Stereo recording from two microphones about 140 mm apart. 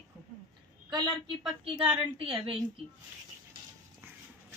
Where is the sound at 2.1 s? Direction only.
40° right (ahead or behind).